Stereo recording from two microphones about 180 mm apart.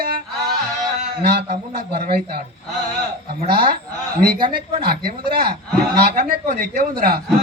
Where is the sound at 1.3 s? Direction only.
60° right (ahead or behind).